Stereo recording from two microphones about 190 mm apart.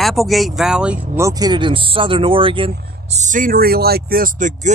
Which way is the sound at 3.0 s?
40° right (ahead or behind).